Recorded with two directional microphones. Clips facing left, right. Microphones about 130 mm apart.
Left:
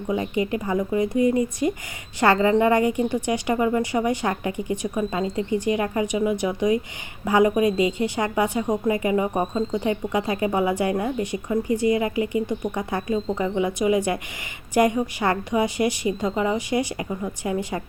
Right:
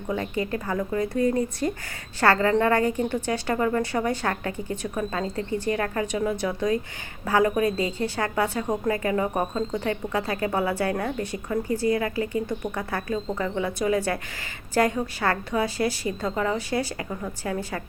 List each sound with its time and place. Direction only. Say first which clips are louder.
0.1 s a woman's voice: left 3 dB; 15° left (ahead or behind)